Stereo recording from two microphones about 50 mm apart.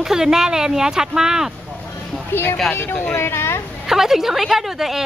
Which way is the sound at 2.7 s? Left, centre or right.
Left.